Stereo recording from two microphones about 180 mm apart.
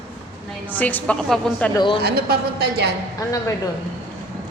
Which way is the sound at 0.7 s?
10° left (ahead or behind).